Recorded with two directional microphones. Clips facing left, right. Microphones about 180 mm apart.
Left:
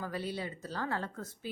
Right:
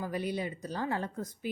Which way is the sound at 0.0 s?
15° right (ahead or behind).